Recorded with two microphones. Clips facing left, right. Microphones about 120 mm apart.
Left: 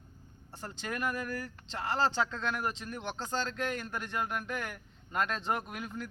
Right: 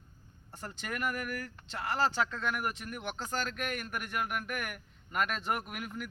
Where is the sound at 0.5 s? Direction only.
15° left (ahead or behind).